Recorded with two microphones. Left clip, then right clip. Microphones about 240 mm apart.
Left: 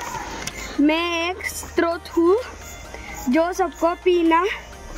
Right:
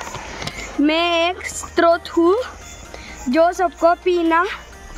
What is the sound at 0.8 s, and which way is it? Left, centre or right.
Speech, right.